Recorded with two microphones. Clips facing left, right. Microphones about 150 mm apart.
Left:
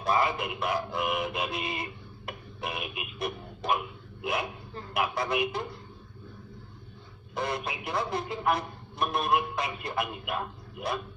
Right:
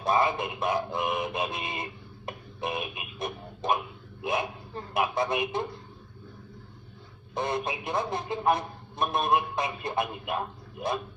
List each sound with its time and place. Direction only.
0.0 s music: 25° right (ahead or behind)
4.2 s dog: 25° right (ahead or behind)
4.9 s speech: 25° right (ahead or behind)
7.3 s speech: 25° right (ahead or behind)